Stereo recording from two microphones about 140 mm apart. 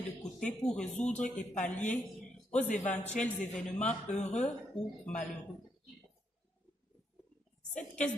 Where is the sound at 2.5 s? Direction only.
60° left (ahead or behind).